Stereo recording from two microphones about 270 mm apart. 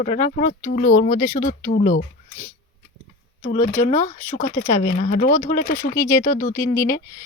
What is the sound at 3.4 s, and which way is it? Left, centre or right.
Speech, left.